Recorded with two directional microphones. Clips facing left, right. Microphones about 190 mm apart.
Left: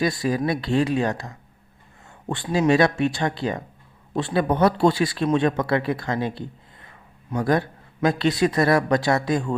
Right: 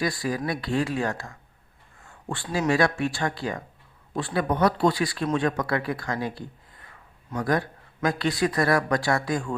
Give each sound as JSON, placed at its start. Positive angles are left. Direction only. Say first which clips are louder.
{"t": 0.0, "sound": "a man's voice", "louder": "left 5 dB", "side_deg": 25}